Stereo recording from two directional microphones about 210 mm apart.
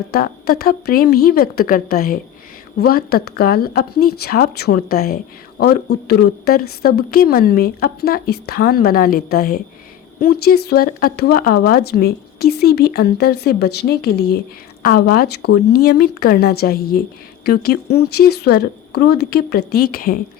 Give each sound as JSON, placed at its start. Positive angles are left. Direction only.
{"t": 0.1, "sound": "speech", "side_deg": 45}